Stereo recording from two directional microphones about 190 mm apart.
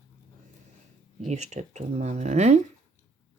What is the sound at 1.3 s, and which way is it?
Speech, 40° right (ahead or behind).